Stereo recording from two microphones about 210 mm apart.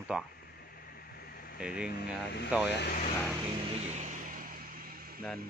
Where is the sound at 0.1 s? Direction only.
5° right (ahead or behind).